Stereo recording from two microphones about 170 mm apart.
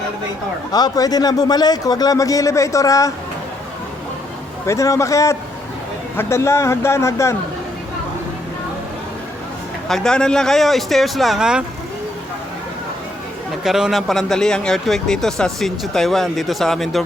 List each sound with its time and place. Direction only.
0.7 s a man's voice: 20° left (ahead or behind)
4.6 s speech: 20° left (ahead or behind)
9.9 s speech: 5° left (ahead or behind)
13.7 s speech: 5° right (ahead or behind)